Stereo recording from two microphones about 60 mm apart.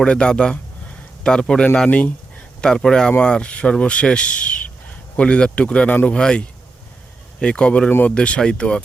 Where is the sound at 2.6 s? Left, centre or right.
Centre.